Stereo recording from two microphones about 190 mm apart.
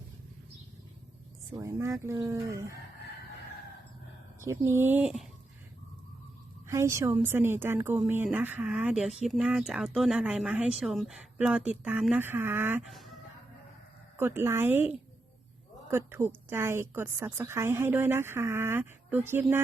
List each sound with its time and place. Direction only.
1.5 s a woman's voice: 15° right (ahead or behind)
4.4 s a woman's voice: 15° right (ahead or behind)
6.7 s a woman's voice: 15° right (ahead or behind)
14.2 s a woman's voice: 10° right (ahead or behind)